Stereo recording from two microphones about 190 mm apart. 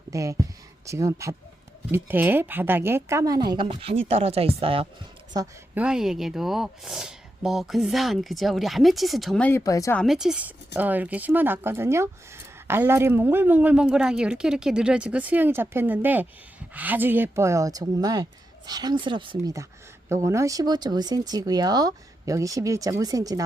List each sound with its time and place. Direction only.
0.1 s a woman's voice: 15° right (ahead or behind)
5.7 s speech: 5° right (ahead or behind); by 10.0 s 15° left (ahead or behind)
10.0 s a woman's voice: centre (ahead or behind); by 23.4 s 20° right (ahead or behind)